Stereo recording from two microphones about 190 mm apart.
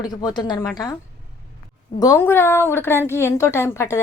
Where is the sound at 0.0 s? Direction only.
20° left (ahead or behind).